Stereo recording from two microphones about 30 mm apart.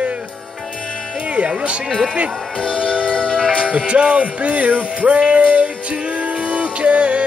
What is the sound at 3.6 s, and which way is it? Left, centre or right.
Music, right.